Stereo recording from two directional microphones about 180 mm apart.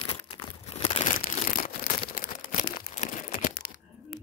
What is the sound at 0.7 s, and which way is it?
Crumpling, 35° left (ahead or behind).